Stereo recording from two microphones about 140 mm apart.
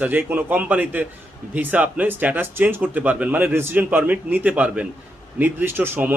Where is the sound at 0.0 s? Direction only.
15° right (ahead or behind).